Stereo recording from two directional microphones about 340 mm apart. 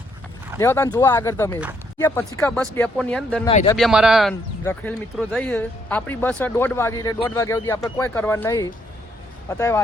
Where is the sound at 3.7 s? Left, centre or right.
Centre.